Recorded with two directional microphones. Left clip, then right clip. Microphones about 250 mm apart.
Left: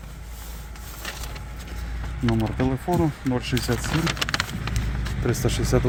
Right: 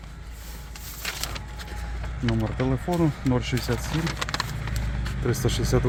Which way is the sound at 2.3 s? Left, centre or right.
Centre.